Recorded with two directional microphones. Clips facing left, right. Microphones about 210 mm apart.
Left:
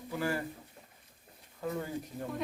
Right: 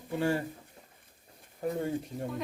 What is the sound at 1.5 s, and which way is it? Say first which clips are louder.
Speech: right 4 dB; 30° right (ahead or behind).